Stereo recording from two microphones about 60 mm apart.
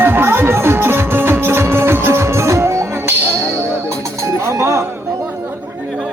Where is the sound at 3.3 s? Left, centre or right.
Right.